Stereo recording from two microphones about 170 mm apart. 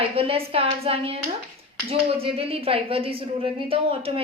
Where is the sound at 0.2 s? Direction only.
35° right (ahead or behind).